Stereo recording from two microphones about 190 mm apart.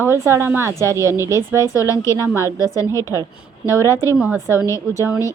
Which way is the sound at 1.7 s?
15° left (ahead or behind).